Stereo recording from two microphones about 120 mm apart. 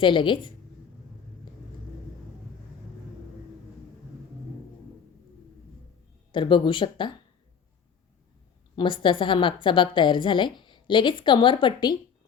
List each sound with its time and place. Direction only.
0.0 s a woman's voice: 40° left (ahead or behind)
6.3 s a woman's voice: 45° left (ahead or behind)
8.7 s a woman's voice: 40° left (ahead or behind)